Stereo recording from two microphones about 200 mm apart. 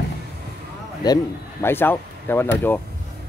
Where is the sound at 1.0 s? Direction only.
15° left (ahead or behind).